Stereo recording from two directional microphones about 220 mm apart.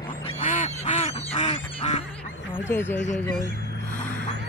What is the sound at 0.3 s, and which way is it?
Goose, 30° left (ahead or behind).